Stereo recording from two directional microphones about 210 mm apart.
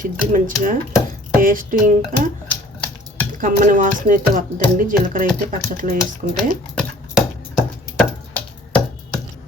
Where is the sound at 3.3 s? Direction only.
40° right (ahead or behind).